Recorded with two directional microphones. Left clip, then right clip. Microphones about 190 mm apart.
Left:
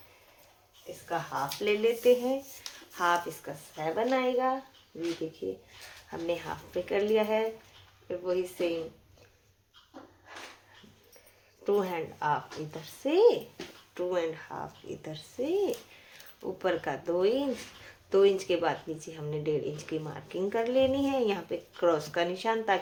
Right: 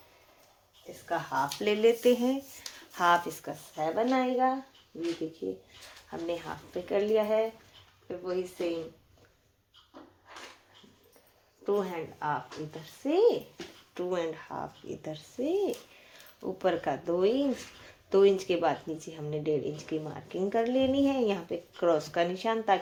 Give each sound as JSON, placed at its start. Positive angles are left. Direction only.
{"t": 1.0, "sound": "speech", "side_deg": -35}
{"t": 4.1, "sound": "speech", "side_deg": -15}
{"t": 6.1, "sound": "speech", "side_deg": -10}
{"t": 11.6, "sound": "speech", "side_deg": -5}
{"t": 13.9, "sound": "speech", "side_deg": -25}